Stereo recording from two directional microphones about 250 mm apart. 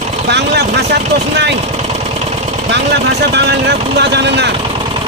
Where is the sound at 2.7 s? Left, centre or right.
Right.